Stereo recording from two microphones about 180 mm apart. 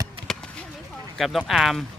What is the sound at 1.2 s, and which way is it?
Speech, centre (ahead or behind).